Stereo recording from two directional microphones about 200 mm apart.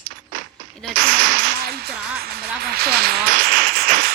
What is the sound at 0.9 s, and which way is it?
Music, 45° right (ahead or behind).